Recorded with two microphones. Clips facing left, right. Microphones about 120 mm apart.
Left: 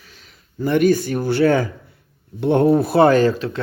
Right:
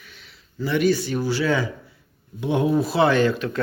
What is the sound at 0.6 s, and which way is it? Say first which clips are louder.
Speech: left 5 dB; 50° left (ahead or behind).